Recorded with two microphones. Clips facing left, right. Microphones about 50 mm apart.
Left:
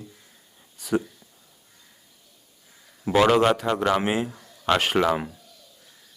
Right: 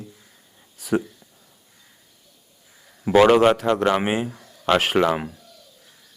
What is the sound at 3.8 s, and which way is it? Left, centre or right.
Speech, centre.